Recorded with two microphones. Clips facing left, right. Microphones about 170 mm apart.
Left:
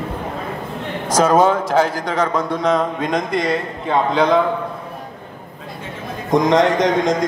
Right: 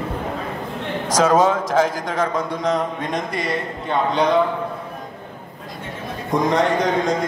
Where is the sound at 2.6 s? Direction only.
90° left.